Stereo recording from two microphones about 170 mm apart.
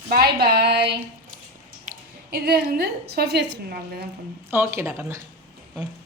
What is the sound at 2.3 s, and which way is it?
A woman's voice, 65° right (ahead or behind).